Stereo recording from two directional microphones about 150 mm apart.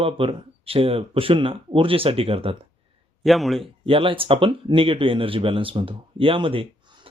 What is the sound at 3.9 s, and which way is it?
Speech, 35° right (ahead or behind).